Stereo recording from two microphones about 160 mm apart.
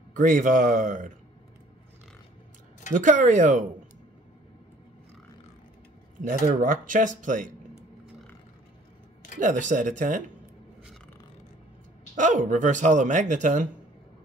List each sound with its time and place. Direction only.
0.1 s speech: 55° right (ahead or behind)
2.9 s speech: 55° right (ahead or behind)
6.2 s speech: 55° right (ahead or behind)
9.4 s speech: 50° right (ahead or behind)
12.2 s speech: 55° right (ahead or behind)